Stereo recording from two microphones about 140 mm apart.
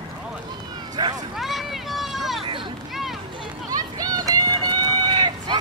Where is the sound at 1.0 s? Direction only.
30° right (ahead or behind).